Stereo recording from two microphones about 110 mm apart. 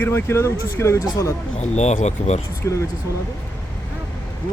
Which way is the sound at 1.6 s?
90° left.